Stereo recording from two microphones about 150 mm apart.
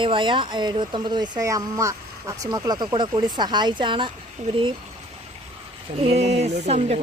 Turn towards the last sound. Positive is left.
turn(degrees=-45)  # may be behind; listen again after turning